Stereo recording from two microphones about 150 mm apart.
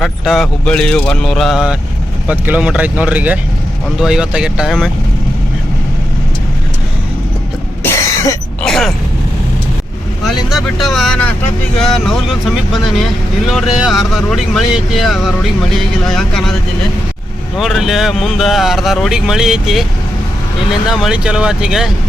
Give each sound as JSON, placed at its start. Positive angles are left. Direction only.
{"t": 0.0, "sound": "speech", "side_deg": 0}
{"t": 7.9, "sound": "cough", "side_deg": 20}
{"t": 8.6, "sound": "a sound", "side_deg": 5}
{"t": 10.2, "sound": "speech", "side_deg": 0}
{"t": 17.6, "sound": "speech", "side_deg": 0}